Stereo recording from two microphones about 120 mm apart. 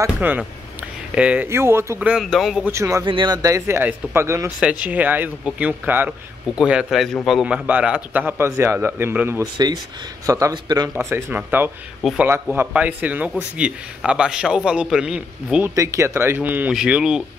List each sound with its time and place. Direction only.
0.0 s a man's voice: 15° right (ahead or behind)
2.7 s speech: 25° right (ahead or behind)
3.1 s speech: 45° right (ahead or behind)
3.4 s speech: 25° right (ahead or behind)
4.6 s a man's voice: 10° right (ahead or behind)
9.4 s speech: 35° right (ahead or behind)
11.0 s speech: 20° right (ahead or behind)
12.0 s speech: centre (ahead or behind)
12.5 s a man's voice: 15° right (ahead or behind)
15.7 s a man's voice: 25° right (ahead or behind); by 17.2 s 5° right (ahead or behind)